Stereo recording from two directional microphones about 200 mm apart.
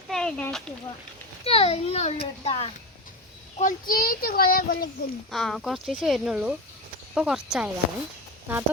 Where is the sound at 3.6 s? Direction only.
45° left (ahead or behind).